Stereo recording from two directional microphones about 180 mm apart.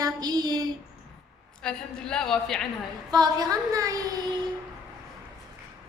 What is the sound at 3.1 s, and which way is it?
A woman's voice, 20° right (ahead or behind).